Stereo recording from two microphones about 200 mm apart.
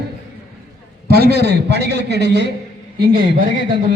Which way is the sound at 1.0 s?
50° right (ahead or behind).